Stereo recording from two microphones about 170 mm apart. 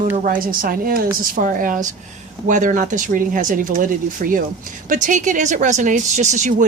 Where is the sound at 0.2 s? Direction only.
55° right (ahead or behind).